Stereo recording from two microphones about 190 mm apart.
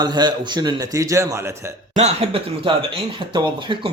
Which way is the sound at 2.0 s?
35° right (ahead or behind).